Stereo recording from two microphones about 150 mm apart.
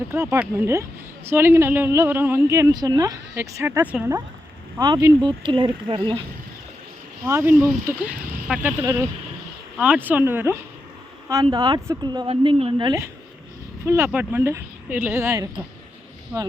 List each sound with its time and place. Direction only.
0.1 s speech: 15° right (ahead or behind); by 6.2 s 35° right (ahead or behind)
7.3 s speech: 15° right (ahead or behind)
8.4 s speech: 5° right (ahead or behind)
8.8 s speech: 20° right (ahead or behind)
11.5 s speech: 30° right (ahead or behind)